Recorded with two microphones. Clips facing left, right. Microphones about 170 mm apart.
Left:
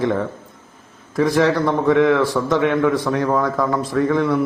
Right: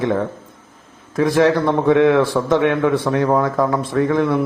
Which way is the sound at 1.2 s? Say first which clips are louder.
Right 2 dB; 20° right (ahead or behind).